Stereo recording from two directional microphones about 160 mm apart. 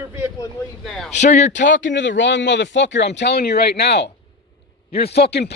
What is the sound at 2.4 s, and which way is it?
Speech, 90° left.